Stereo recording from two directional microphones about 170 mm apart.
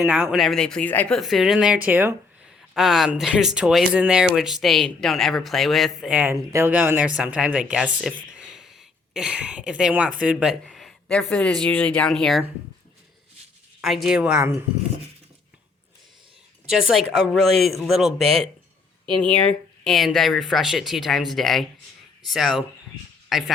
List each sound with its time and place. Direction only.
0.0 s speech: 5° right (ahead or behind)
2.7 s speech: centre (ahead or behind)
13.8 s speech: centre (ahead or behind)
16.6 s speech: centre (ahead or behind)
18.2 s speech: 35° right (ahead or behind)
19.2 s speech: 5° left (ahead or behind)